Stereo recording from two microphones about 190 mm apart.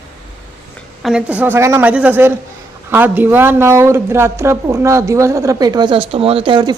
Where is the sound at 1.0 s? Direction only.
5° right (ahead or behind).